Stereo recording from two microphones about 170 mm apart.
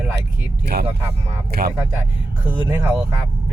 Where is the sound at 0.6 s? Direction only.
70° right (ahead or behind).